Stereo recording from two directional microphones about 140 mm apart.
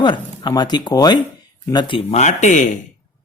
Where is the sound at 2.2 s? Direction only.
55° left (ahead or behind).